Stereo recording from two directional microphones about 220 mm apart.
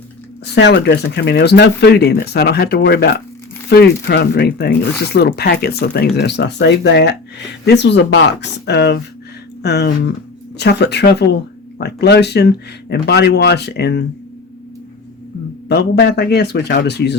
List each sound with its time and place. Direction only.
0.5 s speech: 50° left (ahead or behind)
15.7 s speech: 45° left (ahead or behind)